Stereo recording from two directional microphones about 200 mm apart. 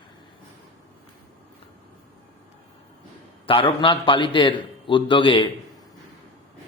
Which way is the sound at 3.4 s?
25° left (ahead or behind).